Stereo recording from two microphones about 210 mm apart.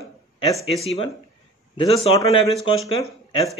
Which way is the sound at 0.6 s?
30° left (ahead or behind).